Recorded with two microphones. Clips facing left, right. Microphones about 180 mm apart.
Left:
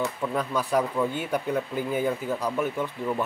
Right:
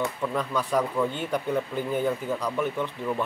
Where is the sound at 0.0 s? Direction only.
5° left (ahead or behind).